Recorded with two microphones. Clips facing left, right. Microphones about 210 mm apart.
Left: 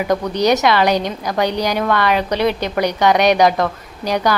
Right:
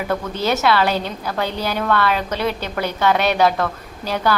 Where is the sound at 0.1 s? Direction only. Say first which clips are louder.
Left 6 dB; 15° left (ahead or behind).